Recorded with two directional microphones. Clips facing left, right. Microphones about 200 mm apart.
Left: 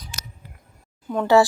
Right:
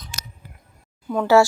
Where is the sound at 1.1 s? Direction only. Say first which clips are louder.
Right 1 dB; centre (ahead or behind).